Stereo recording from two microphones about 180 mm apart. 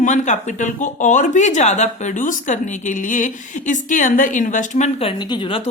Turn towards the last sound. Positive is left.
turn(degrees=30)  # may be behind; listen again after turning